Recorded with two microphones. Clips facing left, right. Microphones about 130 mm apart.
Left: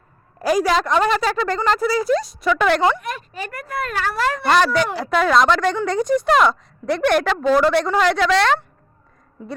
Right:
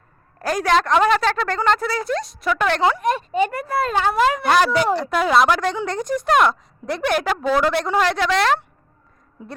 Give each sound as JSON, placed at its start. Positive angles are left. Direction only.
{"t": 0.3, "sound": "a woman's voice", "side_deg": 5}
{"t": 3.0, "sound": "speech", "side_deg": -30}
{"t": 4.4, "sound": "a woman's voice", "side_deg": -5}